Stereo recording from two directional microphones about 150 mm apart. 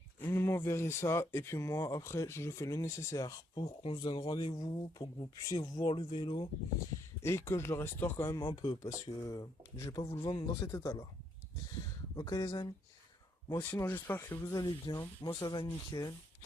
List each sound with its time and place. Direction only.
0.3 s speech: 15° left (ahead or behind)
7.2 s speech: 15° left (ahead or behind)
8.4 s speech: 30° left (ahead or behind)
12.1 s speech: 25° left (ahead or behind)
13.5 s speech: 15° left (ahead or behind)